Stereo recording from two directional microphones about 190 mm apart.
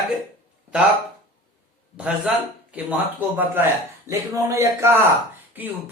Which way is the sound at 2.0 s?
5° right (ahead or behind).